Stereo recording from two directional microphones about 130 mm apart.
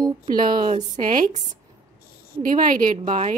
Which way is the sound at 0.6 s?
65° right (ahead or behind).